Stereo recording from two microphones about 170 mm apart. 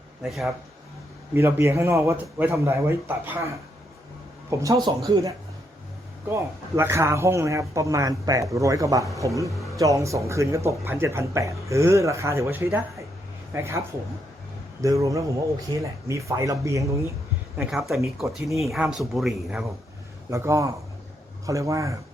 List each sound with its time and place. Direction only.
0.2 s speech: centre (ahead or behind)
1.4 s a man's voice: 15° right (ahead or behind)
17.6 s speech: centre (ahead or behind)
20.3 s speech: 15° right (ahead or behind)